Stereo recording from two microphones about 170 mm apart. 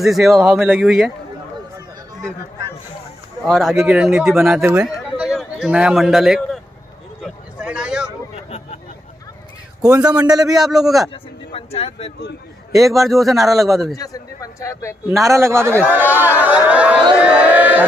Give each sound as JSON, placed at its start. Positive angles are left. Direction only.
{"t": 0.0, "sound": "a man's voice", "side_deg": 0}
{"t": 3.4, "sound": "a man's voice", "side_deg": 0}
{"t": 7.5, "sound": "a sound", "side_deg": -5}
{"t": 8.5, "sound": "a sound", "side_deg": 40}
{"t": 10.0, "sound": "a man's voice", "side_deg": -20}
{"t": 10.5, "sound": "a man's voice", "side_deg": -5}
{"t": 11.5, "sound": "speech", "side_deg": 35}
{"t": 12.7, "sound": "a man's voice", "side_deg": 0}
{"t": 13.9, "sound": "speech", "side_deg": 20}
{"t": 15.0, "sound": "speech", "side_deg": -15}